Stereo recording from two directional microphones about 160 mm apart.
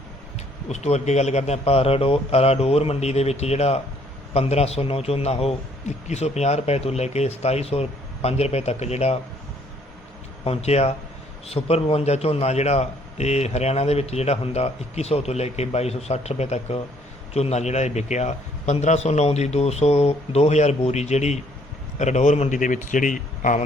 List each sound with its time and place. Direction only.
0.7 s a man's voice: 45° left (ahead or behind)
10.4 s a man's voice: 40° left (ahead or behind)